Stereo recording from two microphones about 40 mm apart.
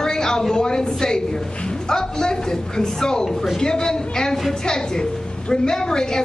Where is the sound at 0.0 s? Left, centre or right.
Centre.